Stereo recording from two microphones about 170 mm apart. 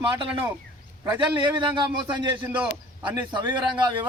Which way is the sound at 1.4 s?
25° right (ahead or behind).